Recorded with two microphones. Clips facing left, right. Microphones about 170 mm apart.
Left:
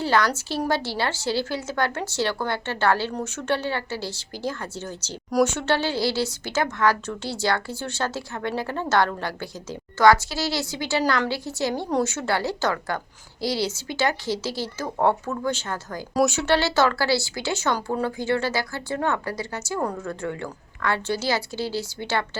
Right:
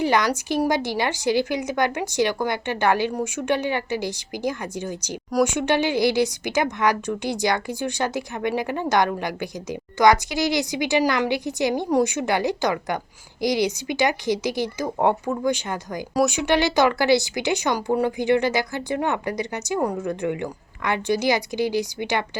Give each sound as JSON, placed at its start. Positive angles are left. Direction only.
{"t": 0.0, "sound": "a woman's voice", "side_deg": -15}